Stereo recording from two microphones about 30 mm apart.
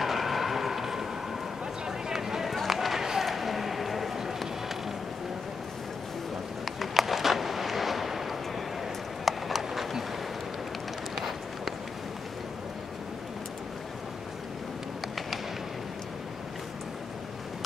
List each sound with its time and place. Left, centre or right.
0.0 s vehicle: centre
1.9 s run: centre
2.5 s run: centre
6.9 s a sound: centre
9.2 s run: centre
11.1 s run: centre